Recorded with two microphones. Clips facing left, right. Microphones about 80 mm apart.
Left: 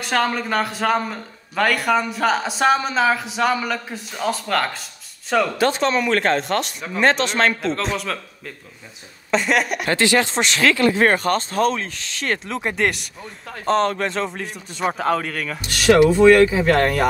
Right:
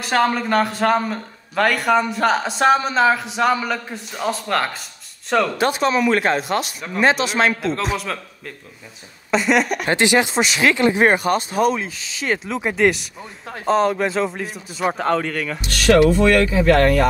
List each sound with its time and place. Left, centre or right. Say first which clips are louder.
0.0 s speech: right 3 dB; centre
9.8 s speech: even; centre
10.3 s speech: right 2 dB; centre
10.6 s speech: even; centre
15.9 s speech: left 2 dB; centre